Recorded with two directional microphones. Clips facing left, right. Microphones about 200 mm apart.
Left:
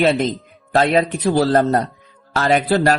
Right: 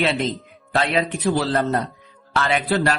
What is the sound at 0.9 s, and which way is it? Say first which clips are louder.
Speech: left 4 dB; 40° left (ahead or behind).